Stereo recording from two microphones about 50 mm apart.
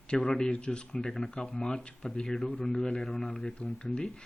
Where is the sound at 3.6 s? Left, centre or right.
Left.